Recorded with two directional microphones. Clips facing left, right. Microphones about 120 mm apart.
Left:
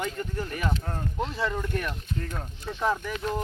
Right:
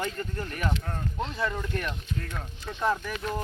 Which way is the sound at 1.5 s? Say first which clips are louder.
Left 2 dB; 5° left (ahead or behind).